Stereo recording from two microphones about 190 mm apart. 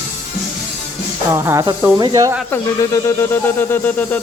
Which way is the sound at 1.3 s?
15° right (ahead or behind).